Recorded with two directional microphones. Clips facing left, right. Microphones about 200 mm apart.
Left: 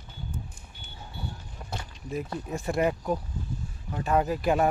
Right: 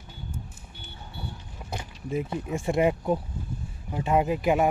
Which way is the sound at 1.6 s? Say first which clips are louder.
Right 3 dB; 15° right (ahead or behind).